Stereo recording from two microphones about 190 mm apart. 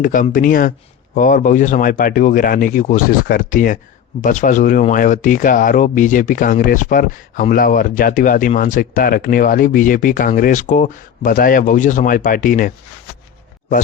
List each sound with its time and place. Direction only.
0.0 s speech: 45° left (ahead or behind)